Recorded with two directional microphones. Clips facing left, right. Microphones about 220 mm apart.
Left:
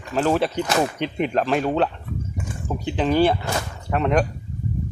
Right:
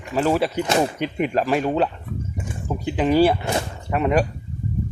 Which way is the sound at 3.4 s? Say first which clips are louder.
Right 3 dB; 25° right (ahead or behind).